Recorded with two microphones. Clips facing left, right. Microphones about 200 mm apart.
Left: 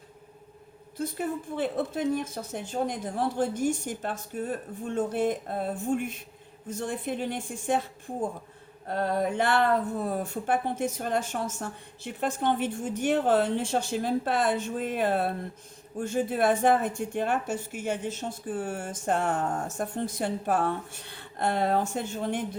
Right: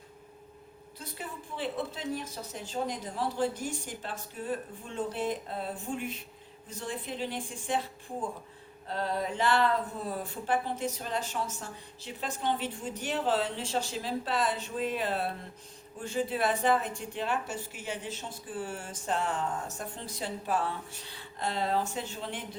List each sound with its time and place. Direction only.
0.9 s a woman's voice: 50° left (ahead or behind)
8.9 s a woman's voice: 55° left (ahead or behind)